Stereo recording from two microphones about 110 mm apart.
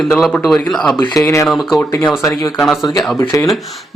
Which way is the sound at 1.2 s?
30° left (ahead or behind).